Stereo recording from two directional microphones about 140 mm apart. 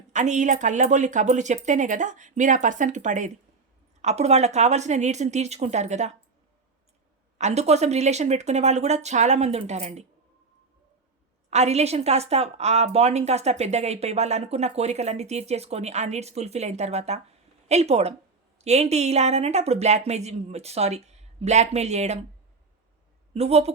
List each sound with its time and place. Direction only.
0.1 s a woman's voice: 60° right (ahead or behind)
7.3 s a woman's voice: 55° right (ahead or behind)
11.5 s a woman's voice: 50° right (ahead or behind)
23.3 s a woman's voice: 50° right (ahead or behind)